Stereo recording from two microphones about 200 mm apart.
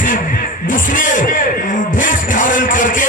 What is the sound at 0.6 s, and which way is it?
Music, 40° left (ahead or behind).